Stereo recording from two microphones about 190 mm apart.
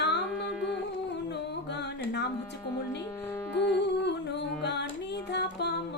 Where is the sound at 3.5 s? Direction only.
65° left (ahead or behind).